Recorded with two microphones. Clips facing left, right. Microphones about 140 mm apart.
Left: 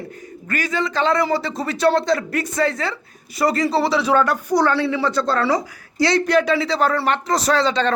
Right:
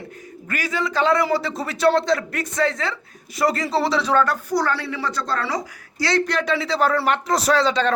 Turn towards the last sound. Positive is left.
turn(degrees=-5)  # may be behind; listen again after turning